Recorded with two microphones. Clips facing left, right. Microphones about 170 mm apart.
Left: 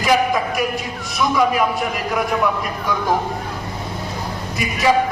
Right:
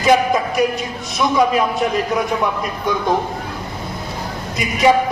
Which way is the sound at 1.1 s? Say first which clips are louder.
Right 2 dB; 20° right (ahead or behind).